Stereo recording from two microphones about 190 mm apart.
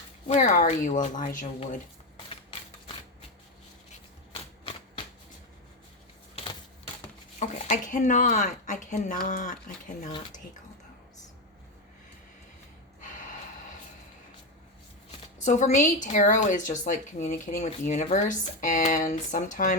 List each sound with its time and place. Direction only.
0.3 s a woman's voice: 40° left (ahead or behind)
2.3 s a sound: 30° left (ahead or behind)
4.7 s shuffling cards: 30° left (ahead or behind)
6.3 s typewriter: 25° left (ahead or behind)
7.3 s a woman's voice: 40° left (ahead or behind)
15.4 s a woman's voice: 40° left (ahead or behind)